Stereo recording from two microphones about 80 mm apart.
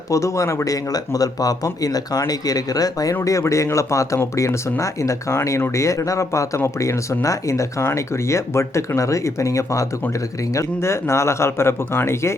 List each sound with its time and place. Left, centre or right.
0.1 s speech: left